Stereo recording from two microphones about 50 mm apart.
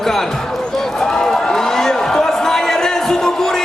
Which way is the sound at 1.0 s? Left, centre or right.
Centre.